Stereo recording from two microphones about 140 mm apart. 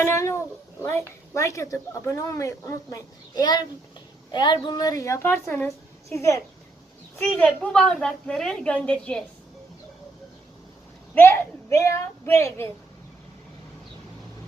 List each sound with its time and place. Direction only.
0.0 s speech: 20° left (ahead or behind)
7.2 s a woman's voice: 10° left (ahead or behind)
11.1 s speech: 15° left (ahead or behind)